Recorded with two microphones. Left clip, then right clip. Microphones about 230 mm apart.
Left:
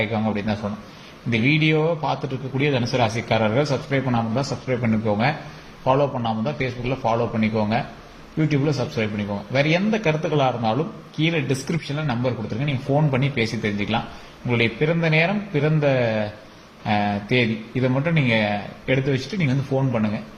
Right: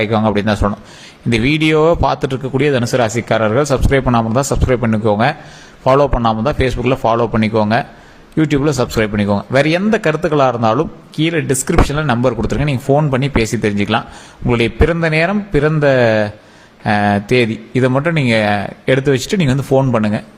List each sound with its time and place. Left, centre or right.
0.0 s a man's voice: right